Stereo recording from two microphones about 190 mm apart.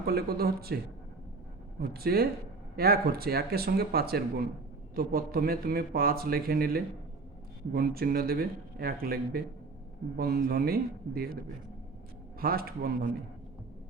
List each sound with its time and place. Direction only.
0.0 s speech: 55° right (ahead or behind)
1.8 s speech: 55° right (ahead or behind)
12.4 s speech: 50° right (ahead or behind)